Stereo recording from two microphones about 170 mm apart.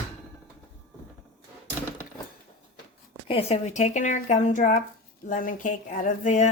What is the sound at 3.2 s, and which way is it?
A woman's voice, 35° left (ahead or behind).